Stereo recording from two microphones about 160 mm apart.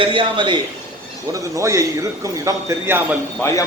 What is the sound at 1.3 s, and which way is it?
A man's voice, 20° right (ahead or behind).